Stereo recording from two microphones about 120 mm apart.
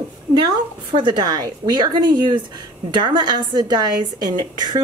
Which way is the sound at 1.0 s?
35° right (ahead or behind).